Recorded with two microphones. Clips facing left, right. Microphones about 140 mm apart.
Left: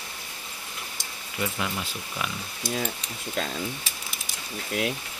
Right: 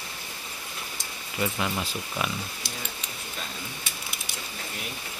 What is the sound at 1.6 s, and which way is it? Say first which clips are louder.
Speech: right 2 dB; 10° right (ahead or behind).